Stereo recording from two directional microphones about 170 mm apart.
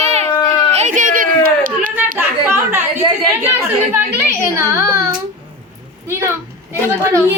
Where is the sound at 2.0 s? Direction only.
15° right (ahead or behind).